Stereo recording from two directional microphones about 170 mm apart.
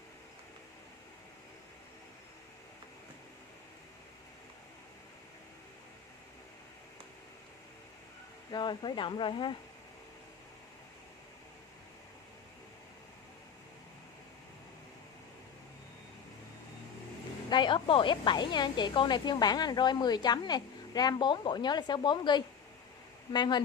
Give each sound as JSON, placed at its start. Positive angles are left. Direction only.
{"t": 8.5, "sound": "a woman's voice", "side_deg": 25}
{"t": 17.5, "sound": "a woman's voice", "side_deg": 25}